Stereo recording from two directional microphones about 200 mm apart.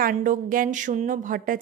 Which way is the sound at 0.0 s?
40° right (ahead or behind).